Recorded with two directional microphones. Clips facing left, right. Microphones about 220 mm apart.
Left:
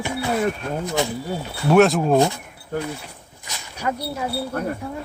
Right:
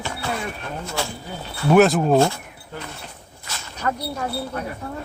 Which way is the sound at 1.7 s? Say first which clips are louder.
Even; centre (ahead or behind).